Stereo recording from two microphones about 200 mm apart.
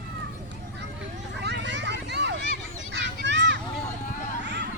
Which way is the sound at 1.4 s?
60° right (ahead or behind).